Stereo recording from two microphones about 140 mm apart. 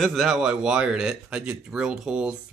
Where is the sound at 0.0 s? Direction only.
Centre (ahead or behind).